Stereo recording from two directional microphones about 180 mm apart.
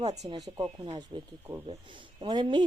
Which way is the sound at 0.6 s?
25° right (ahead or behind).